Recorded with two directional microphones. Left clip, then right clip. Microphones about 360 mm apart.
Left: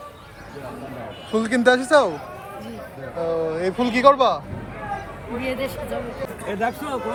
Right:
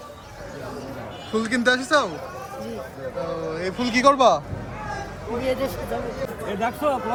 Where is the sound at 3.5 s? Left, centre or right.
Centre.